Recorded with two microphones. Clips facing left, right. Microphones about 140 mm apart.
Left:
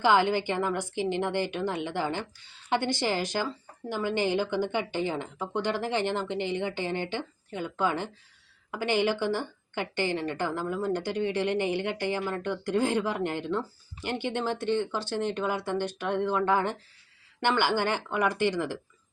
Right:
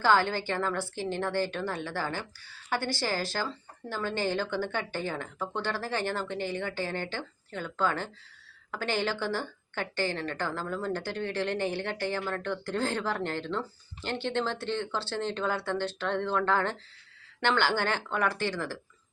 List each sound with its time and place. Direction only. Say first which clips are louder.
0.0 s a woman's voice: left 2 dB; 15° left (ahead or behind)